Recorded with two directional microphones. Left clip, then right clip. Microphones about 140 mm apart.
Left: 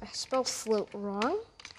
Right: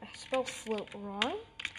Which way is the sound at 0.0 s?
50° left (ahead or behind).